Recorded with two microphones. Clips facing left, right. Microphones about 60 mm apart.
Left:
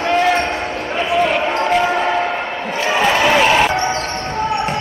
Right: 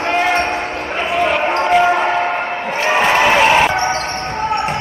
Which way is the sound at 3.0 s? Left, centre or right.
Centre.